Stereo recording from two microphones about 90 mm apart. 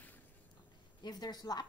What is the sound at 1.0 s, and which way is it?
Speech, 50° left (ahead or behind).